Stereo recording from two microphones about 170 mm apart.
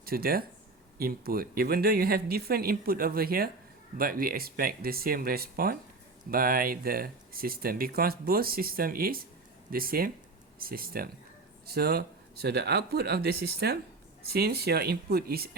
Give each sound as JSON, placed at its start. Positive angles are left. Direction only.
{"t": 0.0, "sound": "speech", "side_deg": -60}